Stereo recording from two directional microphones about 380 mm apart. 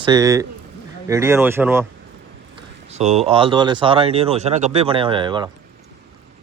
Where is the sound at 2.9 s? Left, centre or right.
Centre.